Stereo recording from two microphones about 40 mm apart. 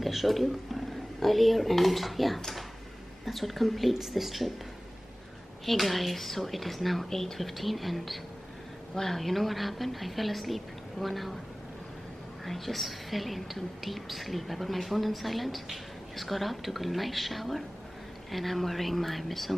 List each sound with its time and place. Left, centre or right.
0.0 s a woman's voice: centre
5.7 s a woman's voice: centre
12.4 s a woman's voice: centre